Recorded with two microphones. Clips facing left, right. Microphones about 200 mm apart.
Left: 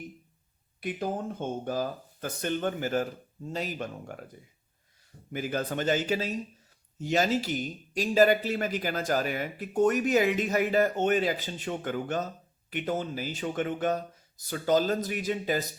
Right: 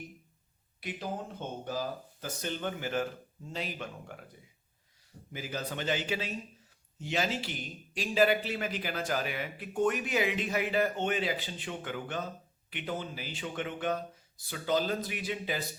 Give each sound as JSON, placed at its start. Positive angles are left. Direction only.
{"t": 0.8, "sound": "speech", "side_deg": 50}
{"t": 5.3, "sound": "speech", "side_deg": 55}